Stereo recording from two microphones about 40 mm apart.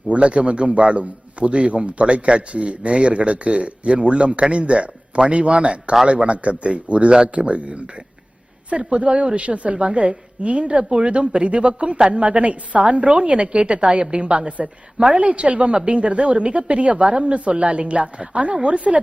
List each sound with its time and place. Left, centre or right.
0.1 s a man's voice: right